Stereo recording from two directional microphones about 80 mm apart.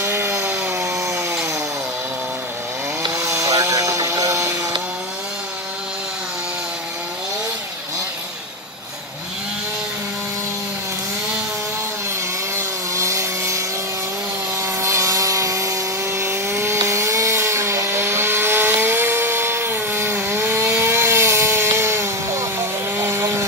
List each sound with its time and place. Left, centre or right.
0.0 s wood: right
0.7 s wood: right
3.0 s chainsaw: right
12.9 s sawing: right
14.6 s chainsaw: right